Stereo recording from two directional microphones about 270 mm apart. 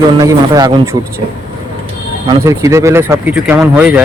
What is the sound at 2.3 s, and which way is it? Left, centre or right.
Speech, centre.